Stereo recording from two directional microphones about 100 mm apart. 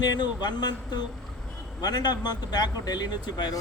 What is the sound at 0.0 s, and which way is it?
Speech, 45° left (ahead or behind).